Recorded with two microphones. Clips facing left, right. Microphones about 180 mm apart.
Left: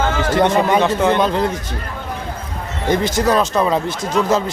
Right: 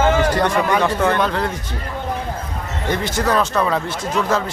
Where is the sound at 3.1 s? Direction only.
20° left (ahead or behind).